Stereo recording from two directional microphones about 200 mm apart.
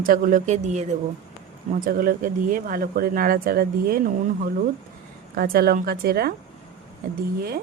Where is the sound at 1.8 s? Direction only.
45° right (ahead or behind).